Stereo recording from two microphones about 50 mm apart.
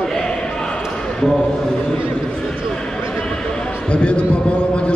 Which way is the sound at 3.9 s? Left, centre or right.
Left.